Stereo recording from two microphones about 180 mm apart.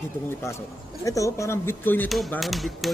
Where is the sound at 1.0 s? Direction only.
15° left (ahead or behind).